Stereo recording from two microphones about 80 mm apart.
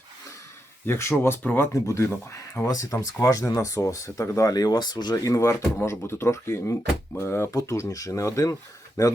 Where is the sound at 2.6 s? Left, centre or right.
Left.